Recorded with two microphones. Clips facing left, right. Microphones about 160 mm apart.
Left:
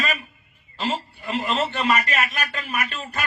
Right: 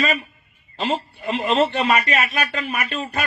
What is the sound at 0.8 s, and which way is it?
A man's voice, 55° right (ahead or behind).